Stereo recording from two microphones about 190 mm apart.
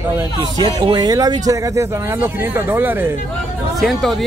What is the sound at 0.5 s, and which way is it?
Speech, 20° right (ahead or behind).